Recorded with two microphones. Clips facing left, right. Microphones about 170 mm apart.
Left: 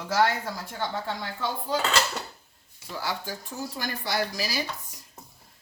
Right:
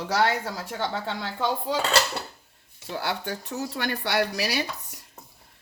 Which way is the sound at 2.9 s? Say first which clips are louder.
Right 3 dB; 65° right (ahead or behind).